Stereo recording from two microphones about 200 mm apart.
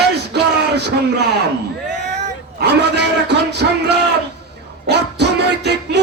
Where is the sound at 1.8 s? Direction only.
35° right (ahead or behind).